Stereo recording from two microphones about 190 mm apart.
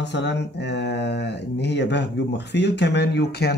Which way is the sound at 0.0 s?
65° left (ahead or behind).